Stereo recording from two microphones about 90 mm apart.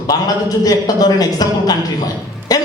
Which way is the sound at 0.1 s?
45° left (ahead or behind).